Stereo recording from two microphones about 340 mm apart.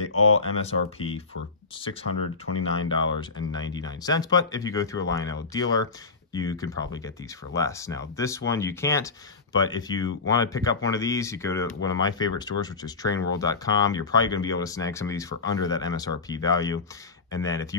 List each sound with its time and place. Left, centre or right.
0.3 s speech: centre
2.5 s speech: left
2.9 s speech: centre